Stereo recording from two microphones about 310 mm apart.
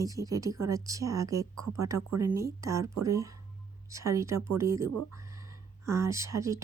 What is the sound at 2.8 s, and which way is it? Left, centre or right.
Speech, right.